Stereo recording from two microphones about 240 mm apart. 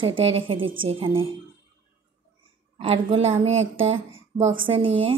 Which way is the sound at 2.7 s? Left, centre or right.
Right.